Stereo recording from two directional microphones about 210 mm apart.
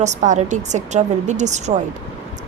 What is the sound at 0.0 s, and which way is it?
A woman's voice, 35° right (ahead or behind).